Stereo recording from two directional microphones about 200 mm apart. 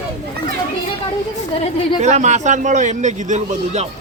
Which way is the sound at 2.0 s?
35° right (ahead or behind).